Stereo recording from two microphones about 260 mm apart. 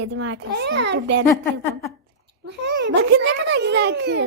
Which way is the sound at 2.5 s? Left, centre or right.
Right.